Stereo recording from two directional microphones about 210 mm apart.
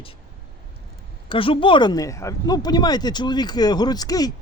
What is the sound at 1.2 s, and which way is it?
Speech, 25° left (ahead or behind).